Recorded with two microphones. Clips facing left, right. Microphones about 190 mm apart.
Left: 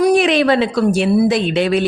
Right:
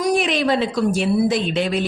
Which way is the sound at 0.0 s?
70° left (ahead or behind).